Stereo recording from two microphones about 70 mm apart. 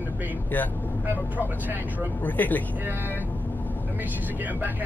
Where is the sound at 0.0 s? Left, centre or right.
Right.